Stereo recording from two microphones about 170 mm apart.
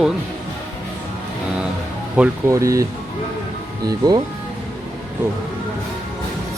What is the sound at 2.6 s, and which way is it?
Speech, 20° right (ahead or behind).